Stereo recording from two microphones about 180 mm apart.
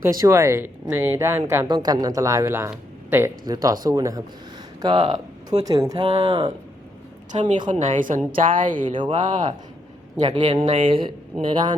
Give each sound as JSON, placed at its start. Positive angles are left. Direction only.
{"t": 0.0, "sound": "a woman's voice", "side_deg": -15}
{"t": 7.7, "sound": "a woman's voice", "side_deg": -45}
{"t": 8.9, "sound": "speech", "side_deg": -30}
{"t": 10.2, "sound": "speech", "side_deg": -25}
{"t": 10.4, "sound": "speech", "side_deg": -35}